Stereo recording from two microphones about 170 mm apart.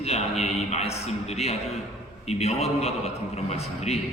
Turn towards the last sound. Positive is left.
turn(degrees=40)  # may be behind; listen again after turning